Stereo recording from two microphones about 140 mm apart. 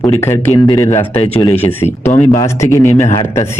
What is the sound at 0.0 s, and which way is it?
A man's voice, 20° left (ahead or behind).